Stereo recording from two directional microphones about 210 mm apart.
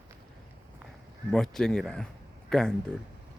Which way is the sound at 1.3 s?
Centre (ahead or behind).